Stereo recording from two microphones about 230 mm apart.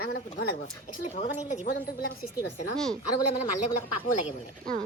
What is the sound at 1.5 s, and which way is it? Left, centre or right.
Speech, left.